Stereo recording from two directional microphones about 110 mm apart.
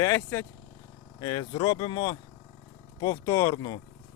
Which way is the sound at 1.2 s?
45° left (ahead or behind).